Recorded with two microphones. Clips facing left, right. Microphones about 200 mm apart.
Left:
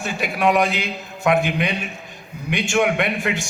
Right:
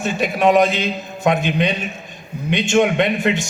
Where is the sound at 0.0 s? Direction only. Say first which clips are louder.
Right 4 dB; 20° right (ahead or behind).